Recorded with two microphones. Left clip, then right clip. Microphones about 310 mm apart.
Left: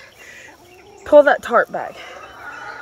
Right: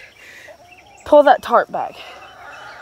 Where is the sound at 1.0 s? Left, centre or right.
Right.